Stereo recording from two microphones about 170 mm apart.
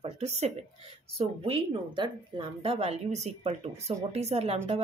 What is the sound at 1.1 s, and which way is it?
Speech, 35° right (ahead or behind).